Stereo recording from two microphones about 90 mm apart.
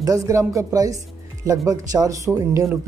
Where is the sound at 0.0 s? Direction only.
40° right (ahead or behind).